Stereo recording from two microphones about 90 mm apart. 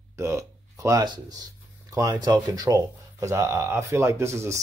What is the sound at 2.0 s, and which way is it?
Speech, 45° right (ahead or behind).